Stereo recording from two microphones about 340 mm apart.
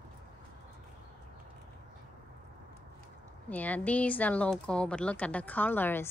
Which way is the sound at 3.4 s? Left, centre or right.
Centre.